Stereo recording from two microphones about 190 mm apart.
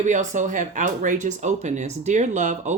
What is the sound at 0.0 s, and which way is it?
Speech, 40° right (ahead or behind).